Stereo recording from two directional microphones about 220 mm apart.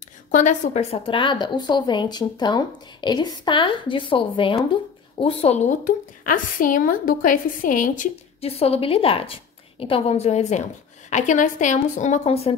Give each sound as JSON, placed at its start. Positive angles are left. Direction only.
{"t": 0.3, "sound": "a woman's voice", "side_deg": 35}